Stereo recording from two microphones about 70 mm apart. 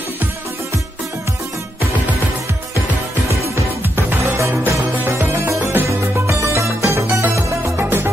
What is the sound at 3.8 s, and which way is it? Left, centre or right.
Music, right.